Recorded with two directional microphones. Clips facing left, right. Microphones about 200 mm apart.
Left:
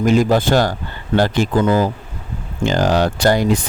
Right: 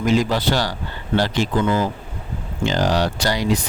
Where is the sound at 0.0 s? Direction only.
50° left (ahead or behind).